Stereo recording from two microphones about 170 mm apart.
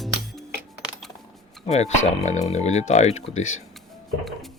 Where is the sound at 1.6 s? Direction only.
40° left (ahead or behind).